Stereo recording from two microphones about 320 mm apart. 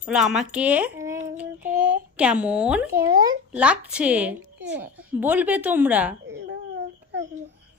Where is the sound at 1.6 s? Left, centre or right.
Right.